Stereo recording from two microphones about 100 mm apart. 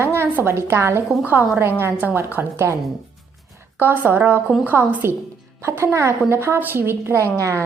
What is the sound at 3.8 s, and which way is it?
A woman's voice, 20° right (ahead or behind).